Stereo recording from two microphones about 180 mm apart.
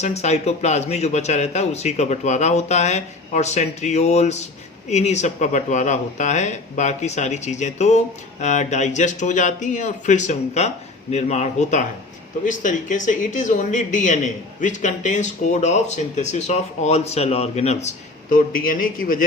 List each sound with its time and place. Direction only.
0.0 s speech: 35° left (ahead or behind)